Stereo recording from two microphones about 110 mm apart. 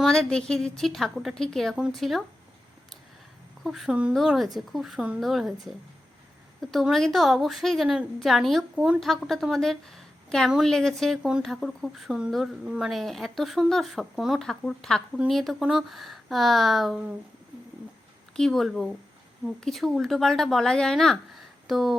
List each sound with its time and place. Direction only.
0.0 s speech: 5° left (ahead or behind)
3.6 s speech: centre (ahead or behind)
9.0 s a woman's voice: centre (ahead or behind)
18.3 s speech: 5° left (ahead or behind)